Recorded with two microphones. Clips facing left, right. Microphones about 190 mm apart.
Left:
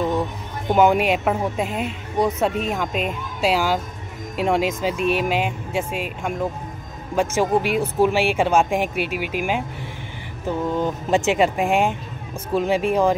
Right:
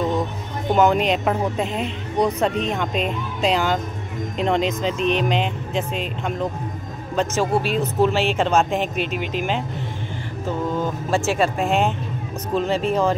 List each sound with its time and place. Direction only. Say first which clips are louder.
0.7 s a woman's voice: left 1 dB; 10° left (ahead or behind)